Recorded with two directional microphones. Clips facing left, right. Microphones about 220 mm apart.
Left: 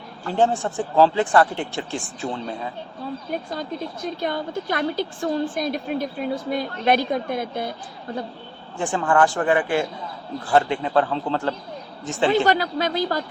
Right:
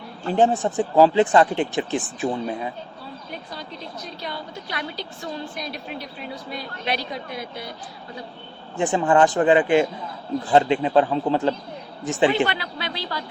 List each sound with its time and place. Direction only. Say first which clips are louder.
0.3 s speech: right 2 dB; 20° right (ahead or behind)
3.5 s a woman's voice: left 6 dB; 50° left (ahead or behind)
8.8 s speech: right 2 dB; 20° right (ahead or behind)
12.5 s a woman's voice: left 8 dB; 45° left (ahead or behind)